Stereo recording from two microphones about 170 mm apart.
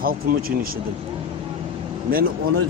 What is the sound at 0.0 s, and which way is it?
Speech, 60° right (ahead or behind).